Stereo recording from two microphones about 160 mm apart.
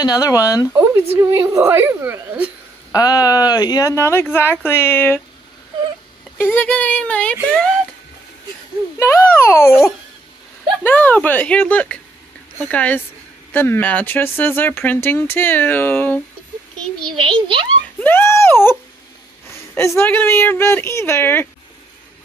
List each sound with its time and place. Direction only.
0.0 s speech: 25° left (ahead or behind)
0.7 s speech: 15° right (ahead or behind)
2.9 s speech: 25° left (ahead or behind)
6.3 s speech: 15° left (ahead or behind)
8.9 s speech: 15° left (ahead or behind)
10.8 s speech: 10° left (ahead or behind)
17.1 s a child's voice: 30° right (ahead or behind)
18.0 s speech: 15° left (ahead or behind)
20.0 s speech: 15° left (ahead or behind)